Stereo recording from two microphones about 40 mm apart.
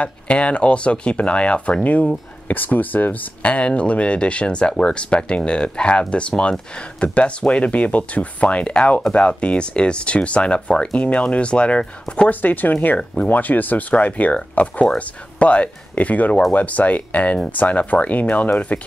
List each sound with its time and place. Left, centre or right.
0.0 s speech: left
2.4 s speech: left
12.3 s speech: left